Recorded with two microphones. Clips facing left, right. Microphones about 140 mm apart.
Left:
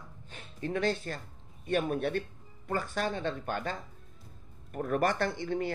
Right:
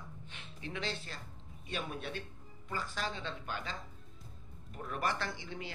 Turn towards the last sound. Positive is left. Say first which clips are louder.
# left 10 dB
turn(degrees=55)  # may be behind; listen again after turning